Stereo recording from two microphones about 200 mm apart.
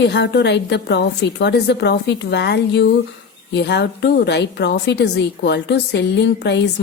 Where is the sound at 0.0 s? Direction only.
60° left (ahead or behind).